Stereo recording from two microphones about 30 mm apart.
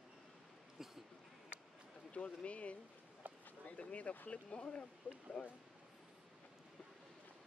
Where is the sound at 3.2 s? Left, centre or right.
Right.